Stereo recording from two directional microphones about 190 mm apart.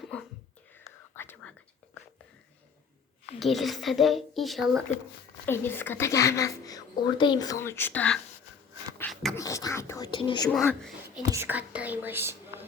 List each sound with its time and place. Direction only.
1.1 s whispering: 10° left (ahead or behind)
3.3 s speech: centre (ahead or behind)
5.5 s a woman's voice: 10° left (ahead or behind)
9.0 s beatboxing: 10° left (ahead or behind)
9.4 s speech: 15° left (ahead or behind)
10.5 s speech: centre (ahead or behind)
11.3 s speech: 10° right (ahead or behind)